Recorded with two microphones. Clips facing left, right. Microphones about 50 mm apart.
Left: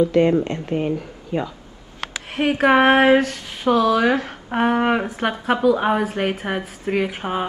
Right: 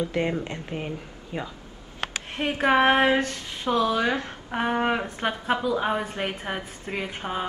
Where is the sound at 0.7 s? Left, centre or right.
Centre.